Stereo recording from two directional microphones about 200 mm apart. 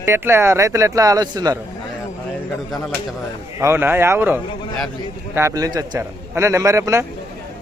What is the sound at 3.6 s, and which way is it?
A man's voice, 10° right (ahead or behind).